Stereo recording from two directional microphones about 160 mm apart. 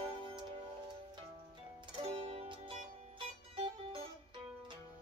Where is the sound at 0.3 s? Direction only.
30° right (ahead or behind).